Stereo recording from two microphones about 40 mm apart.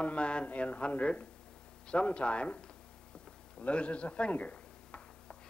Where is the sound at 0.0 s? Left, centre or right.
Left.